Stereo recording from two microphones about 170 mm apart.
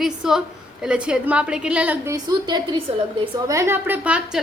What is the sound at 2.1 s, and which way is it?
Speech, 25° right (ahead or behind).